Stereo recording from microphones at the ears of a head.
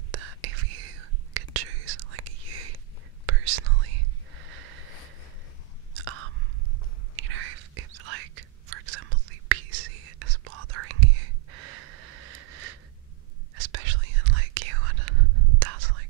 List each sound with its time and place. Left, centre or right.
0.1 s whispering: right
5.9 s chewing: right
7.2 s whispering: right